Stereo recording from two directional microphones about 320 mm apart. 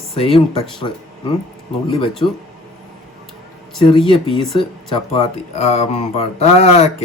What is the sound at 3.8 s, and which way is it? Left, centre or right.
Speech, centre.